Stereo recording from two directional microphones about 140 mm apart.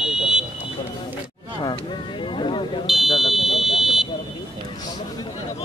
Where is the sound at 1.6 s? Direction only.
35° left (ahead or behind).